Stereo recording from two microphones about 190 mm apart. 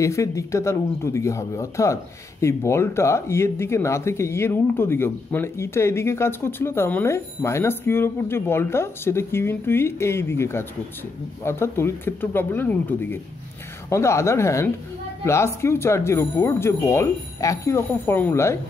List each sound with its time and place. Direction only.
0.0 s speech: 15° left (ahead or behind)